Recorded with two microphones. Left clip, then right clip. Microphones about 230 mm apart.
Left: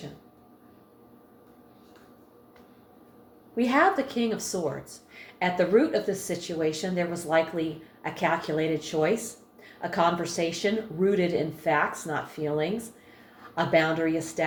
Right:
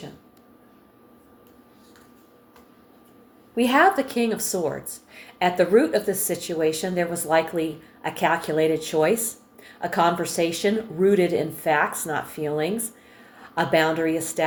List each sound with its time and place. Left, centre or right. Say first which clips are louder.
3.5 s speech: right 5 dB; right